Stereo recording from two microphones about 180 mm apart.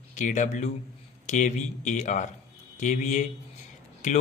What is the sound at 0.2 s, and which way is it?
Speech, 45° left (ahead or behind).